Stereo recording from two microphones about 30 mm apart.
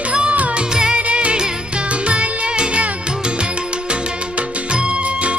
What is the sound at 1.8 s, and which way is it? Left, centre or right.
Music, right.